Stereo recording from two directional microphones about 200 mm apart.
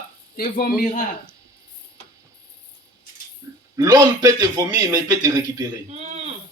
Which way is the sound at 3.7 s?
20° right (ahead or behind).